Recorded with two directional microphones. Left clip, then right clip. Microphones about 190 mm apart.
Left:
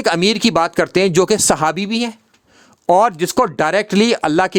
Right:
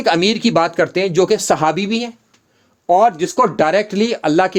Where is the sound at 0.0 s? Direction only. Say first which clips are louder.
Even; 40° left (ahead or behind).